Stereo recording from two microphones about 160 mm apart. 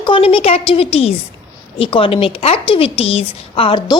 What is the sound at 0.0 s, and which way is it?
A woman's voice, 35° left (ahead or behind).